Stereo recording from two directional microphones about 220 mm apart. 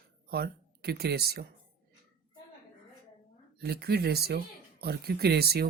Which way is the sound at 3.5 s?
45° right (ahead or behind).